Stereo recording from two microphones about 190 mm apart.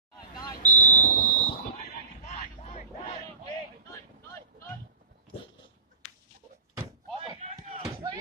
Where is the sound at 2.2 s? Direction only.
35° left (ahead or behind).